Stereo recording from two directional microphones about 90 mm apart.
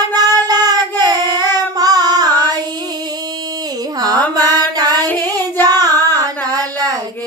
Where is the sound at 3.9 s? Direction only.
45° right (ahead or behind).